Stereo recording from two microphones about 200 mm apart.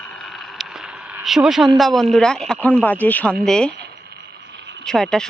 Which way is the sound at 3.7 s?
55° right (ahead or behind).